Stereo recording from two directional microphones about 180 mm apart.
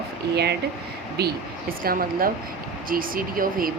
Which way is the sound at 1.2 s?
65° right (ahead or behind).